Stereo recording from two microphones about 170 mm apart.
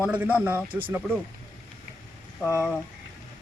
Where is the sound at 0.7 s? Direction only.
30° right (ahead or behind).